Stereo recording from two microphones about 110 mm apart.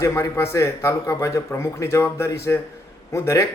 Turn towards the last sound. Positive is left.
turn(degrees=25)  # may be behind; listen again after turning